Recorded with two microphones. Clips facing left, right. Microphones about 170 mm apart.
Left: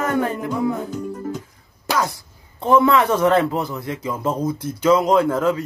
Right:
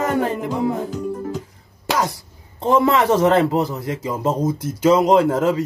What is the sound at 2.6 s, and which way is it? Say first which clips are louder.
A man's voice: even; 30° right (ahead or behind).